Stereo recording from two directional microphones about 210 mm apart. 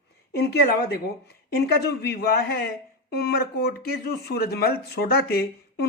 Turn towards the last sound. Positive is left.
turn(degrees=50)  # may be behind; listen again after turning